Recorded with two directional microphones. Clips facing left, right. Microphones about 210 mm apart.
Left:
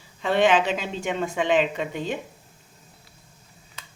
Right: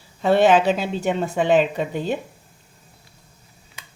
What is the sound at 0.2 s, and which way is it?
A woman's voice, 40° right (ahead or behind).